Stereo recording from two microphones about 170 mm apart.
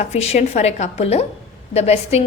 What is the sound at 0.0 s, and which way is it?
A woman's voice, 40° left (ahead or behind).